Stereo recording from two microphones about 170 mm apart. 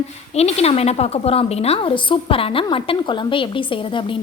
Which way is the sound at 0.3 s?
40° left (ahead or behind).